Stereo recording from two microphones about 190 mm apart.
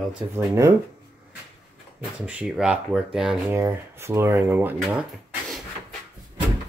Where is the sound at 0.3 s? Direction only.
15° right (ahead or behind).